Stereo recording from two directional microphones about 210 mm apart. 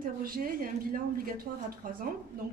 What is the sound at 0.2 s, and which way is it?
A woman's voice, 45° right (ahead or behind).